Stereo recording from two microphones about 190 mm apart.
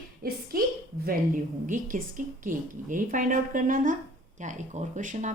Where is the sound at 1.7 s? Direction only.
45° right (ahead or behind).